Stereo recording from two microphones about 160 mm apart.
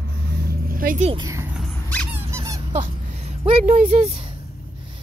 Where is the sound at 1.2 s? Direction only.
15° right (ahead or behind).